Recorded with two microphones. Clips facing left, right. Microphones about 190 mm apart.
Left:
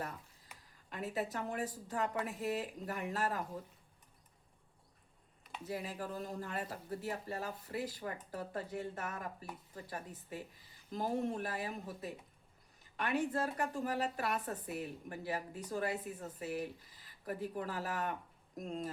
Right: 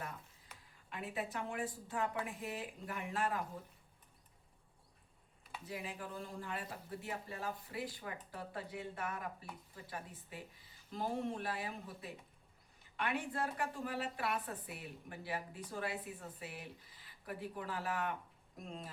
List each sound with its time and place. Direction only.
0.9 s speech: 40° left (ahead or behind)
5.6 s a woman's voice: 40° left (ahead or behind)